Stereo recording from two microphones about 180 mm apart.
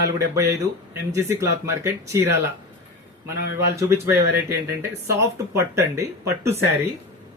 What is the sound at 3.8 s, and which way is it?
Speech, 15° right (ahead or behind).